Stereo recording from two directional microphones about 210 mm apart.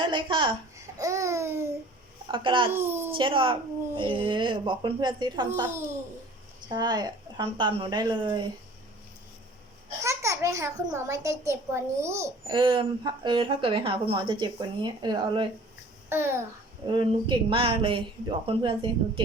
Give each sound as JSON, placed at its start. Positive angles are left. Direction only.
{"t": 0.0, "sound": "speech", "side_deg": -20}
{"t": 0.9, "sound": "babbling", "side_deg": -15}
{"t": 2.2, "sound": "a child's voice", "side_deg": -25}
{"t": 2.7, "sound": "a child's voice", "side_deg": -10}
{"t": 3.1, "sound": "a child's voice", "side_deg": -25}
{"t": 10.0, "sound": "a child's voice", "side_deg": -15}
{"t": 16.8, "sound": "a child's voice", "side_deg": -25}